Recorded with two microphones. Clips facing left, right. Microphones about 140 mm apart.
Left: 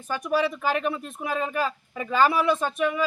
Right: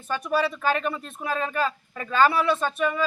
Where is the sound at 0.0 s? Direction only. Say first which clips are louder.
Even; 10° left (ahead or behind).